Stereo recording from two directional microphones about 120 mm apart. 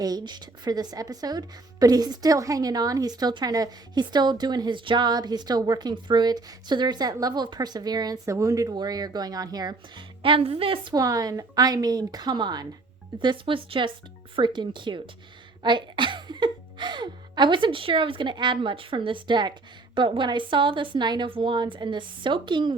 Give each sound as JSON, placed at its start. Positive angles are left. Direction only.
{"t": 0.0, "sound": "a woman's voice", "side_deg": -35}
{"t": 10.9, "sound": "a woman's voice", "side_deg": -30}